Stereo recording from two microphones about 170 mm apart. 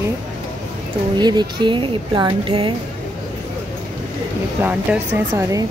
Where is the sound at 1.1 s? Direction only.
25° right (ahead or behind).